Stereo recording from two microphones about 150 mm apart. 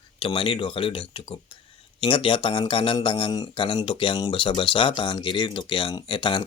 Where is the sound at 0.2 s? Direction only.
35° left (ahead or behind).